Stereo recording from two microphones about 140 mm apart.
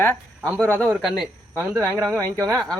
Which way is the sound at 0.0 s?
15° left (ahead or behind).